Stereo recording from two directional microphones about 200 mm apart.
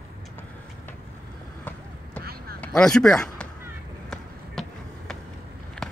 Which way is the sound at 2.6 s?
5° left (ahead or behind).